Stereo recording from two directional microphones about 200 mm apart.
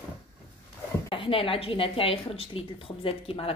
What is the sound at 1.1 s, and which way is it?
A woman's voice, 25° left (ahead or behind).